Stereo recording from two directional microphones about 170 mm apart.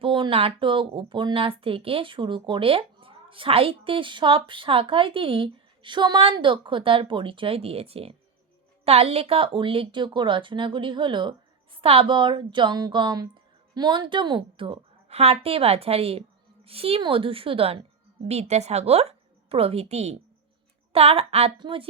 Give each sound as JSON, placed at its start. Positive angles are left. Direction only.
{"t": 0.0, "sound": "a woman's voice", "side_deg": -30}